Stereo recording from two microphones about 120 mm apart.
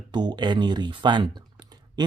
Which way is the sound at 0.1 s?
40° right (ahead or behind).